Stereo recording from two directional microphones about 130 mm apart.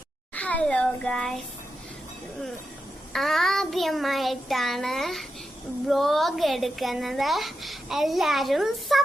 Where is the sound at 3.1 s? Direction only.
Centre (ahead or behind).